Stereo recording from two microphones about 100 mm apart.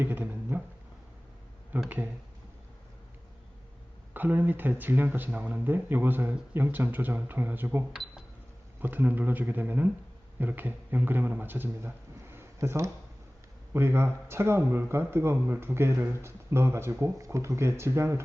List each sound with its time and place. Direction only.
0.0 s a sound: 20° right (ahead or behind)
1.7 s speech: 15° right (ahead or behind)
4.1 s a man's voice: 15° right (ahead or behind)